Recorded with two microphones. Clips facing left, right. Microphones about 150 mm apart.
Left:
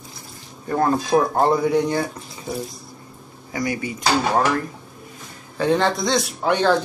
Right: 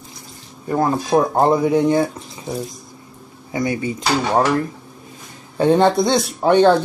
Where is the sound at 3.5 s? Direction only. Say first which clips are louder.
Right 4 dB; 25° right (ahead or behind).